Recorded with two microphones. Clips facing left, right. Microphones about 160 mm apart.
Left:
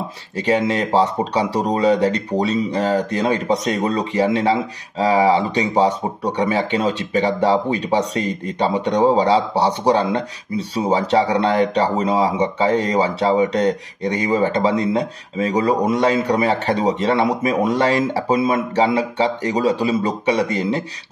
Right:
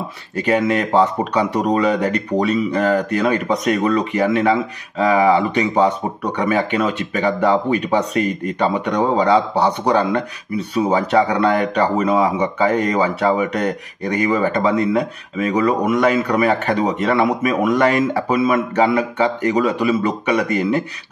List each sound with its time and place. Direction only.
0.4 s speech: 25° left (ahead or behind)